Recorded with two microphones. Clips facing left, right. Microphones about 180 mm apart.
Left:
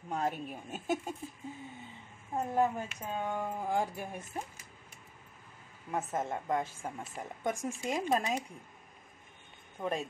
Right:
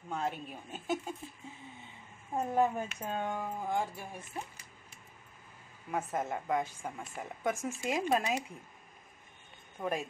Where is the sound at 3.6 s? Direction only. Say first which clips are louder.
Left 1 dB; 35° left (ahead or behind).